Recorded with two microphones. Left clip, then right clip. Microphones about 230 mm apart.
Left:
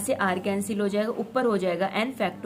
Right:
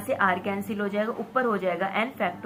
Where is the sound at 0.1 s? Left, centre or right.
Left.